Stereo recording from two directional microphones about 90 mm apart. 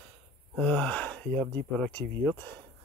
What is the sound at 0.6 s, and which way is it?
Gasp, 10° left (ahead or behind).